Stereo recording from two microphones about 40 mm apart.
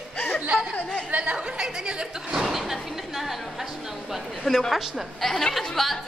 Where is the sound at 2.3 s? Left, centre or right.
Centre.